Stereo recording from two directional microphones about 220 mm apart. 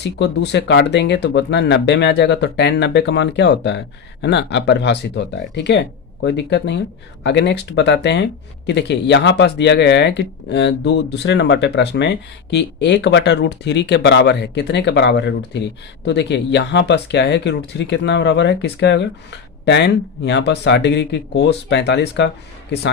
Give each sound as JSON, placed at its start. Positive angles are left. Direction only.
{"t": 0.0, "sound": "speech", "side_deg": 50}